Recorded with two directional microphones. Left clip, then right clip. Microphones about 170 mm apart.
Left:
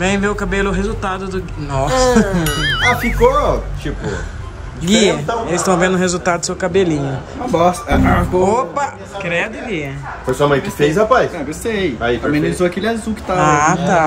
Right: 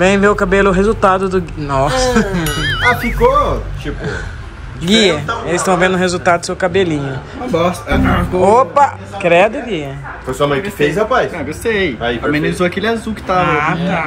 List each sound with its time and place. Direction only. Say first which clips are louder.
0.0 s a man's voice: right 6 dB; 5° left (ahead or behind)
2.4 s a man's voice: right 1 dB; centre (ahead or behind)
4.8 s speech: right 2 dB; 15° left (ahead or behind)
7.5 s a man's voice: left 1 dB; 5° left (ahead or behind)
10.8 s speech: left 1 dB; 75° left (ahead or behind)
11.3 s speech: right 4 dB; 5° left (ahead or behind)